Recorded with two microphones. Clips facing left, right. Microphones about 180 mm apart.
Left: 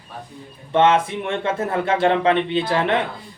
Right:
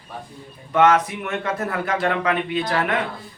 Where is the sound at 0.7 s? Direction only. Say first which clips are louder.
Left 1 dB; 25° left (ahead or behind).